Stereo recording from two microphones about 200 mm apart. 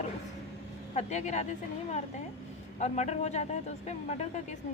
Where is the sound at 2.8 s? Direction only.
35° left (ahead or behind).